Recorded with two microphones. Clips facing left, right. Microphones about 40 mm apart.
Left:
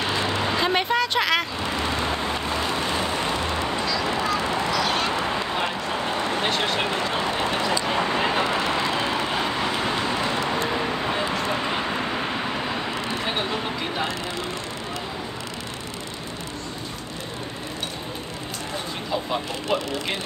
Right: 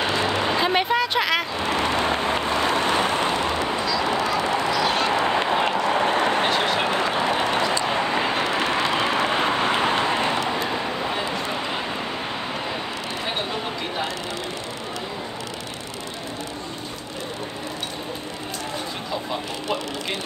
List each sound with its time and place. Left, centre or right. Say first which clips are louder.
0.0 s vehicle: right 2 dB; centre
1.6 s vehicle: right 3 dB; right
3.5 s duck: right 2 dB; centre
4.3 s a sound: right 2 dB; centre
5.2 s honk: right 5 dB; right
5.7 s a sound: right 6 dB; right
6.5 s a sound: right 2 dB; centre
7.0 s vehicle: right 3 dB; right
8.2 s vehicle: even; centre
8.5 s vehicle: right 1 dB; centre
8.8 s vehicle: right 2 dB; right
9.2 s vehicle: right 3 dB; right
10.7 s vehicle: left 1 dB; centre
13.2 s a sound: right 1 dB; centre